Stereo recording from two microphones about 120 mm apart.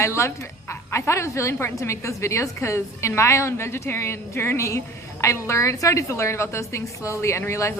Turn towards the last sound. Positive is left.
turn(degrees=25)  # may be behind; listen again after turning